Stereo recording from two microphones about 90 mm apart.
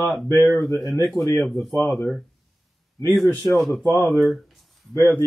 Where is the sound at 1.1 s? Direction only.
30° left (ahead or behind).